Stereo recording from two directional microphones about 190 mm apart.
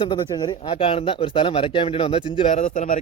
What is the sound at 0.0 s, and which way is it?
Speech, 25° left (ahead or behind).